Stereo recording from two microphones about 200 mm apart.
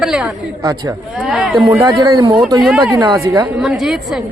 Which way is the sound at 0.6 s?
15° right (ahead or behind).